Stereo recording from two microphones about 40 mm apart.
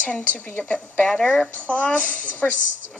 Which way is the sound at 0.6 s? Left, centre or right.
Left.